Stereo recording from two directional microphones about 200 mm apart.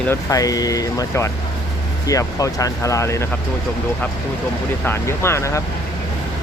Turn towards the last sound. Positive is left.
turn(degrees=15)  # may be behind; listen again after turning